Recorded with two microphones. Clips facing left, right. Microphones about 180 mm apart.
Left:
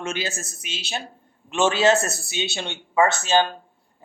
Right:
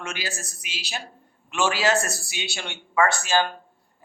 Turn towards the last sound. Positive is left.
turn(degrees=20)  # may be behind; listen again after turning